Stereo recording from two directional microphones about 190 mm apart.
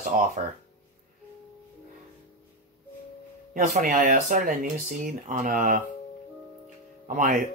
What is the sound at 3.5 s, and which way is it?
Speech, 45° right (ahead or behind).